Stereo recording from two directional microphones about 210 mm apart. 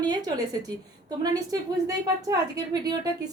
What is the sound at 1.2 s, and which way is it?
A woman's voice, 15° right (ahead or behind).